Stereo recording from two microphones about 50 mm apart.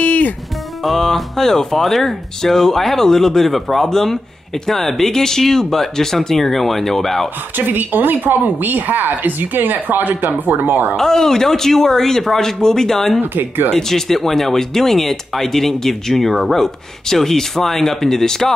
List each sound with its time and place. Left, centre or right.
0.0 s music: left
0.8 s speech: centre
7.5 s a woman's voice: right
11.0 s speech: centre
13.2 s speech: right
13.7 s speech: centre